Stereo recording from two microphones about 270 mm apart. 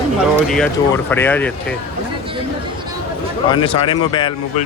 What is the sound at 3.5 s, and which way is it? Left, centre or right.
Speech, centre.